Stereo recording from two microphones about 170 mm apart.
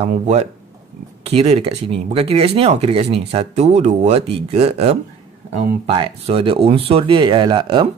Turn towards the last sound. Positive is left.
turn(degrees=-30)  # may be behind; listen again after turning